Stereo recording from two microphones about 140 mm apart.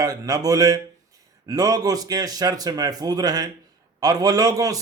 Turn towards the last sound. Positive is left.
turn(degrees=-25)  # may be behind; listen again after turning